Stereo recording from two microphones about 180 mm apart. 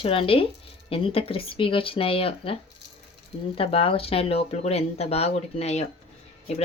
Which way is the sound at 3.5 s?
30° left (ahead or behind).